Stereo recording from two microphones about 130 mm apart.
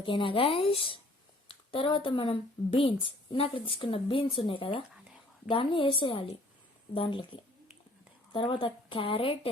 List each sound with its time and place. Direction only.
0.0 s a woman's voice: 40° left (ahead or behind)